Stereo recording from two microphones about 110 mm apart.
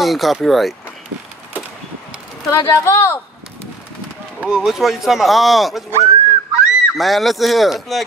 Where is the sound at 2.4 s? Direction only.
30° left (ahead or behind).